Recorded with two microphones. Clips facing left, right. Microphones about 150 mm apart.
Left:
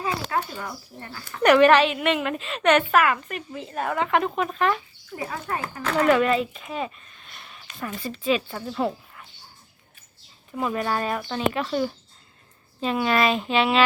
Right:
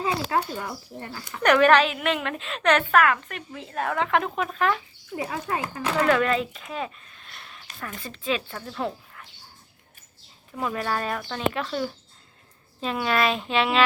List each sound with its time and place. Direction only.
0.3 s speech: 25° right (ahead or behind)
1.4 s a woman's voice: 5° left (ahead or behind)
5.1 s speech: 20° right (ahead or behind)
6.1 s speech: 5° left (ahead or behind)
10.5 s a woman's voice: 5° left (ahead or behind)